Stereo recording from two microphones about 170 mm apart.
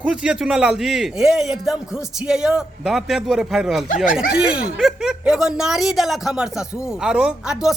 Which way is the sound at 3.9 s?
55° left (ahead or behind).